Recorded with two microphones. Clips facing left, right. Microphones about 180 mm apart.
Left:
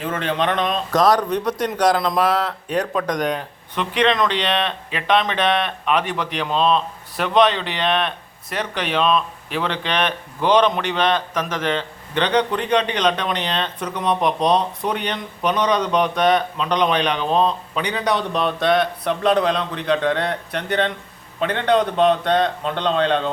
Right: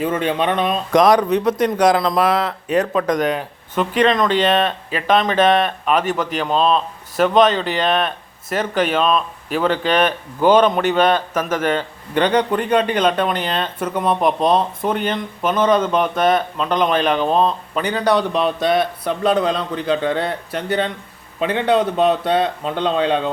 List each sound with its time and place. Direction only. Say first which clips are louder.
0.0 s speech: right 3 dB; 10° right (ahead or behind)
3.8 s speech: right 3 dB; 45° right (ahead or behind)
5.0 s speech: right 2 dB; centre (ahead or behind)
5.5 s speech: right 5 dB; 40° right (ahead or behind)
5.8 s speech: right 3 dB; centre (ahead or behind)
7.5 s speech: right 6 dB; 40° right (ahead or behind)
7.8 s speech: right 3 dB; centre (ahead or behind)
8.7 s speech: right 8 dB; 45° right (ahead or behind)
9.0 s speech: right 1 dB; centre (ahead or behind)